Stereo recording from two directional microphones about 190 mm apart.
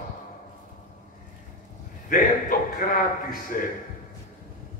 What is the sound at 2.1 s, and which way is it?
A woman's voice, 45° left (ahead or behind).